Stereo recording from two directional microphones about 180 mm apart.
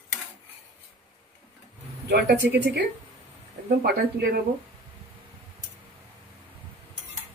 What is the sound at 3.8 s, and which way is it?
Speech, 60° right (ahead or behind).